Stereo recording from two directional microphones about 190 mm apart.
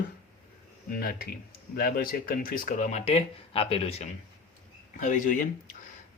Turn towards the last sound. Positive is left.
turn(degrees=45)  # may be behind; listen again after turning